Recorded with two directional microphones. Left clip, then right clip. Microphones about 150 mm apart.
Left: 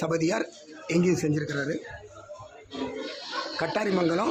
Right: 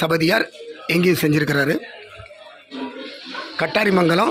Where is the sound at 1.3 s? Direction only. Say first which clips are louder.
Right 11 dB; 40° right (ahead or behind).